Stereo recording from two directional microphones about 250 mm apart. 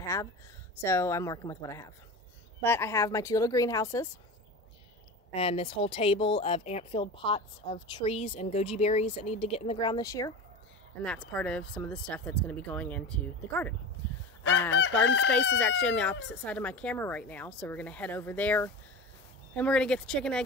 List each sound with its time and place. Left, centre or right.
0.0 s a sound: centre
0.8 s speech: centre
5.3 s speech: left; by 13.7 s centre
15.0 s chicken: left
15.6 s speech: centre